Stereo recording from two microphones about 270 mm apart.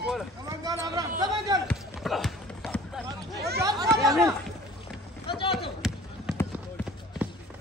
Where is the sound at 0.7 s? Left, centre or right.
Centre.